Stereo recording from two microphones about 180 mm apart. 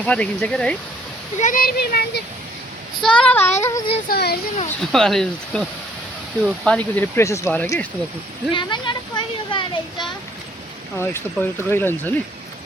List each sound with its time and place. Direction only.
0.0 s speech: 5° left (ahead or behind)
1.4 s speech: 50° left (ahead or behind)
3.0 s speech: 5° left (ahead or behind)
4.1 s speech: 60° left (ahead or behind)
4.8 s speech: centre (ahead or behind)
8.5 s speech: 25° left (ahead or behind)
11.0 s speech: 10° left (ahead or behind)